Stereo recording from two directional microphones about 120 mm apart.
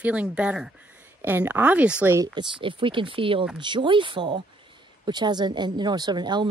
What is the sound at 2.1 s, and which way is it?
Speech, 35° right (ahead or behind).